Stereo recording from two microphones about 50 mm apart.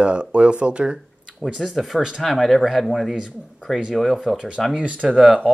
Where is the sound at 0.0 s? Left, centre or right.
Right.